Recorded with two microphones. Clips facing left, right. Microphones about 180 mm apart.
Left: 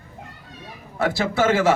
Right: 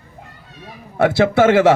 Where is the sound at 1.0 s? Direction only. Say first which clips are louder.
Right 8 dB; 65° right (ahead or behind).